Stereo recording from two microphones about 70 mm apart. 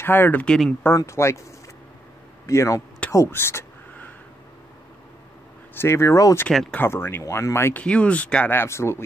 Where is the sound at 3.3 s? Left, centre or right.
Left.